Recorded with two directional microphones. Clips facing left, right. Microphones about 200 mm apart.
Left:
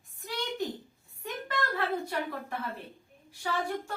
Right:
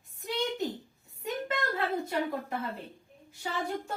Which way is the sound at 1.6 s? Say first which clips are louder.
Left 4 dB; 20° right (ahead or behind).